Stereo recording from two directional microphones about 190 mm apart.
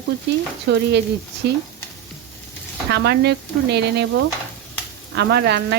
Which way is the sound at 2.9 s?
60° right (ahead or behind).